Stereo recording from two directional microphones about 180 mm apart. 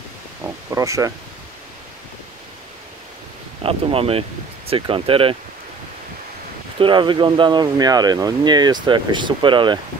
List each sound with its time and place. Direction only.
0.4 s a sound: 15° right (ahead or behind)
3.6 s speech: 30° right (ahead or behind)
6.8 s speech: 25° right (ahead or behind)